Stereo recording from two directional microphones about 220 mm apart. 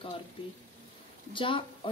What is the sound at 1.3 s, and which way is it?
Speech, 25° left (ahead or behind).